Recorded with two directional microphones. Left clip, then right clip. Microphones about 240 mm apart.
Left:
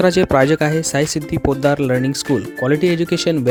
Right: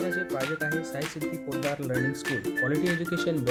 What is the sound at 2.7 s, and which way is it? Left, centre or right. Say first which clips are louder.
Speech: left 11 dB; left.